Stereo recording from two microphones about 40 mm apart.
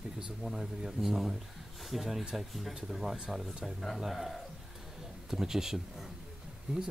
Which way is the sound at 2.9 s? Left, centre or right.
Centre.